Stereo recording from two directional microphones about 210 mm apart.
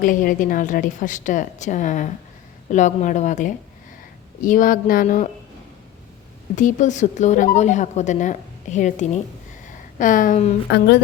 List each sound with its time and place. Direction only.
0.0 s a woman's voice: 40° left (ahead or behind)
6.6 s a woman's voice: 35° left (ahead or behind)
10.7 s speech: 50° left (ahead or behind)